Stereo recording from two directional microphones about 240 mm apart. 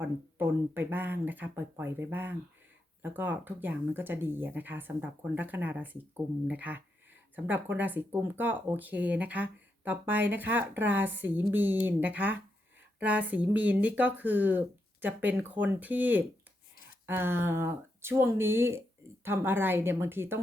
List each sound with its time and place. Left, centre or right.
0.0 s speech: centre